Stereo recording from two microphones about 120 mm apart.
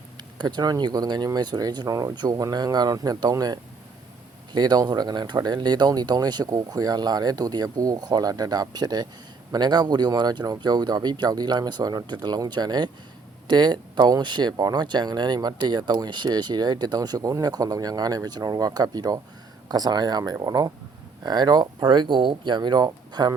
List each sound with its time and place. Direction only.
0.3 s speech: 35° right (ahead or behind)